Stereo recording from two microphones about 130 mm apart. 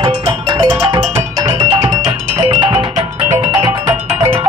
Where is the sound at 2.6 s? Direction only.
35° right (ahead or behind).